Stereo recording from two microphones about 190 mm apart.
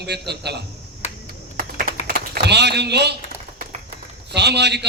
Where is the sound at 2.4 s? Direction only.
60° right (ahead or behind).